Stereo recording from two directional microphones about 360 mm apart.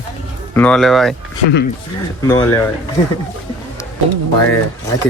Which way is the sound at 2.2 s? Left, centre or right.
Centre.